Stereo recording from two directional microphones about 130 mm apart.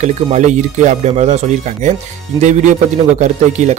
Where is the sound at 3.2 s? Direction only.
60° right (ahead or behind).